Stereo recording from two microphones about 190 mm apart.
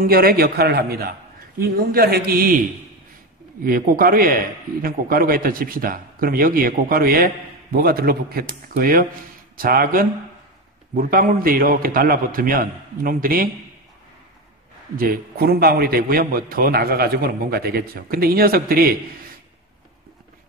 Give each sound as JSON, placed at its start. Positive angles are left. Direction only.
{"t": 0.0, "sound": "a man's voice", "side_deg": -50}
{"t": 3.6, "sound": "a man's voice", "side_deg": -50}
{"t": 15.0, "sound": "a man's voice", "side_deg": -50}